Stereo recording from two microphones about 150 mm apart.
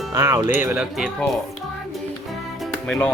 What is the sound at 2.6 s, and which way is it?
Music, 10° left (ahead or behind).